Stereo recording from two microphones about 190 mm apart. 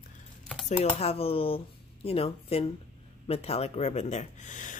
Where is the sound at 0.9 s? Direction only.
30° left (ahead or behind).